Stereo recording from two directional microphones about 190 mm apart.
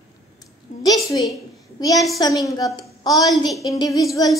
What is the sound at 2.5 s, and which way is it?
Speech, 20° left (ahead or behind).